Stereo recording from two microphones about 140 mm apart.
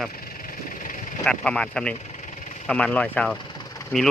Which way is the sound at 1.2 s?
5° left (ahead or behind).